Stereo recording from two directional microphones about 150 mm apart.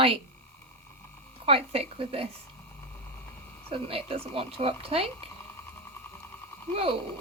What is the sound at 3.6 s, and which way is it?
Speech, 40° right (ahead or behind).